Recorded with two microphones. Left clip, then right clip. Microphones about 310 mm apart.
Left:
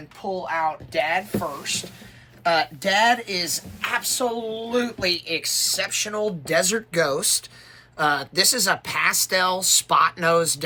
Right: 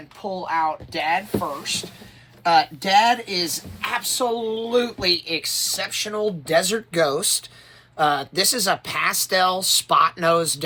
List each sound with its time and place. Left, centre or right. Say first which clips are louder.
0.2 s speech: right 2 dB; centre
2.4 s speech: right 3 dB; centre